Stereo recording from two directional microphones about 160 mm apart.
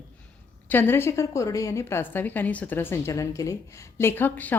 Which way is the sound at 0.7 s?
15° left (ahead or behind).